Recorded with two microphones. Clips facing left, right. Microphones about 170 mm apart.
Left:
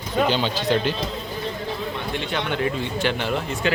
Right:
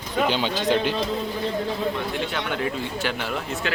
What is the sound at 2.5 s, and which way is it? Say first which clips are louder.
Speech: left 2 dB; centre (ahead or behind).